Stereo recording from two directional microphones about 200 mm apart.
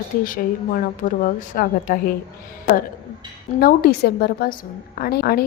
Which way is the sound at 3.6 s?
50° left (ahead or behind).